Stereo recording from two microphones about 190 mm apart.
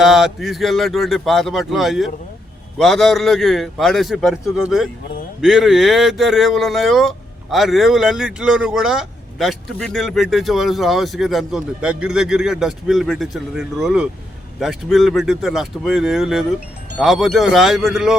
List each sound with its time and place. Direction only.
0.0 s speech: centre (ahead or behind)